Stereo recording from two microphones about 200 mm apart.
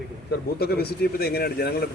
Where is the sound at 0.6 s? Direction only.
50° left (ahead or behind).